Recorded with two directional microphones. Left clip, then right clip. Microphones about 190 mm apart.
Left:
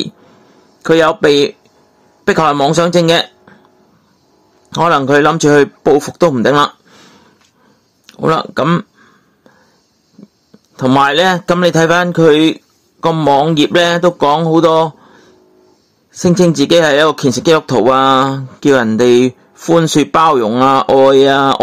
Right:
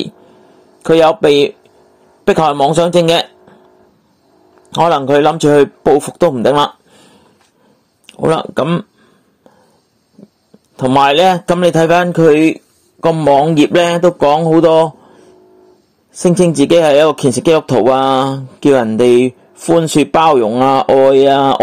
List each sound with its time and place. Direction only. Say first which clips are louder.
0.8 s a man's voice: right 1 dB; centre (ahead or behind)
2.9 s speech: even; centre (ahead or behind)
4.7 s speech: even; 5° left (ahead or behind)
6.4 s a sound: even; 5° left (ahead or behind)
8.2 s a sound: even; 5° left (ahead or behind)
10.8 s a man's voice: even; 10° left (ahead or behind)
11.1 s speech: right 2 dB; centre (ahead or behind)